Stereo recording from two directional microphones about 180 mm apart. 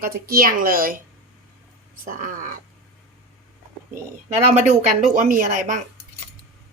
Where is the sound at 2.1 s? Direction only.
50° right (ahead or behind).